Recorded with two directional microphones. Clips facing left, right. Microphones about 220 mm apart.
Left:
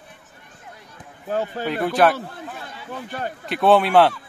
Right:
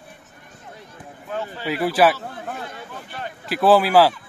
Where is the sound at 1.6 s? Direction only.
5° right (ahead or behind).